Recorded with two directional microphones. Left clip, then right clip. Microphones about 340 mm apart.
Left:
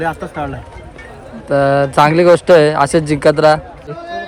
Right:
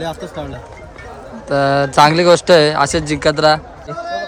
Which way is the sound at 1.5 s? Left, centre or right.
Centre.